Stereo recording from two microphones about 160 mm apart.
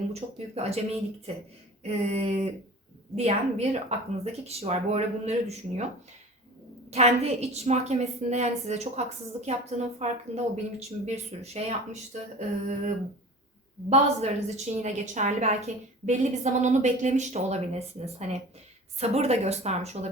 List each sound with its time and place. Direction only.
0.1 s speech: 40° right (ahead or behind)
1.8 s speech: 40° right (ahead or behind)
6.9 s a woman's voice: 40° right (ahead or behind)
13.9 s a woman's voice: 40° right (ahead or behind)